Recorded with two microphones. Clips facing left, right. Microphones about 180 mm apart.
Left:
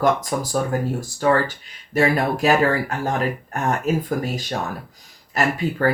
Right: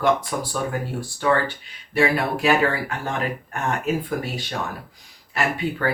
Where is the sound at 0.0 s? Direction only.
40° left (ahead or behind).